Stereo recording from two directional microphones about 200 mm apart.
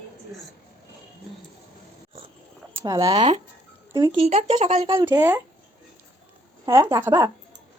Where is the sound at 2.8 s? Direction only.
20° right (ahead or behind).